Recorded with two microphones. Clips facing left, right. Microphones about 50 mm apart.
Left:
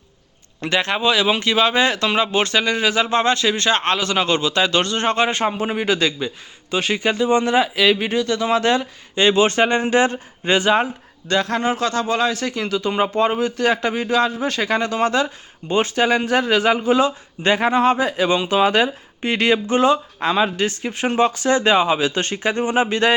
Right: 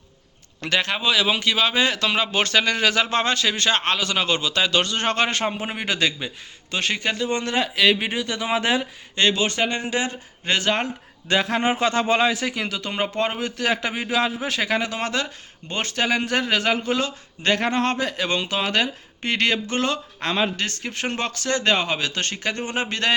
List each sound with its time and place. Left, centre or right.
0.6 s a man's voice: left
2.3 s a man's voice: left
2.6 s a man's voice: centre; by 5.0 s left
5.0 s speech: centre
7.9 s speech: centre
9.3 s speech: left
10.4 s speech: centre
11.3 s speech: centre
11.6 s speech: right; by 23.1 s centre